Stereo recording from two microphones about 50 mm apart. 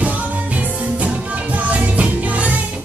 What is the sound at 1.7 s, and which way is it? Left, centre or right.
Music, right.